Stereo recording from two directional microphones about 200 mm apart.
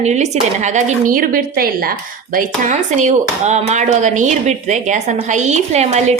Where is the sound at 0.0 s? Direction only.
35° right (ahead or behind).